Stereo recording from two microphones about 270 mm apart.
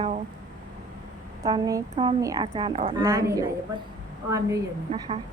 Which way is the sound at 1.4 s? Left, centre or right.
Centre.